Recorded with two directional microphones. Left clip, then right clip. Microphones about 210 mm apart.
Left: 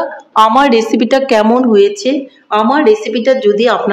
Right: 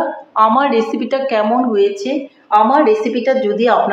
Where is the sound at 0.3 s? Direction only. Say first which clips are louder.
Left 4 dB; 55° left (ahead or behind).